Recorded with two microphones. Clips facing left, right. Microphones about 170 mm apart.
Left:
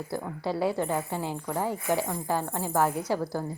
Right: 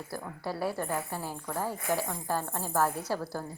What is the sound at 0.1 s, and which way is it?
Speech, 20° left (ahead or behind).